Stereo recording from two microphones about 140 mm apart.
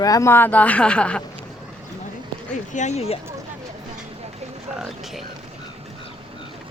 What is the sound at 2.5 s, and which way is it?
Speech, 60° left (ahead or behind).